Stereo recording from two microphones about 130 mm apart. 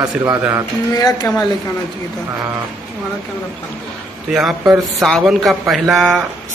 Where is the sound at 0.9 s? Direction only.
30° left (ahead or behind).